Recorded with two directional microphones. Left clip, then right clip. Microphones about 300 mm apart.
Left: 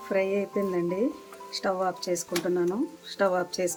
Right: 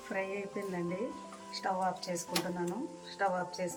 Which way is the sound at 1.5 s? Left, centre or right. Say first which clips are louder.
Left 6 dB; centre.